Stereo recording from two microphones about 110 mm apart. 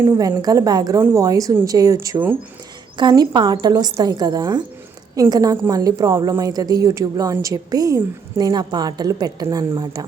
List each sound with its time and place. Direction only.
0.2 s speech: 35° right (ahead or behind)